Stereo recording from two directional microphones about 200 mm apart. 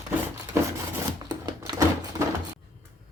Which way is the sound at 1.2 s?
20° right (ahead or behind).